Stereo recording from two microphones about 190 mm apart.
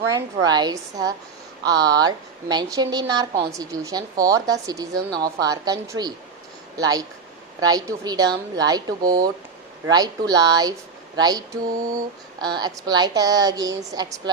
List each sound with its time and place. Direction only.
0.1 s a woman's voice: 20° right (ahead or behind)
11.7 s mantra: 45° right (ahead or behind)
12.4 s a woman's voice: 20° right (ahead or behind)